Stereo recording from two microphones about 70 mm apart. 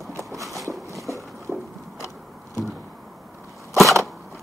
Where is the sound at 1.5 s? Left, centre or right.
Right.